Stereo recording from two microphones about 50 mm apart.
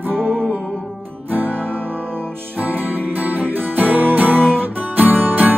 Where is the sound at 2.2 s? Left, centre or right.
Right.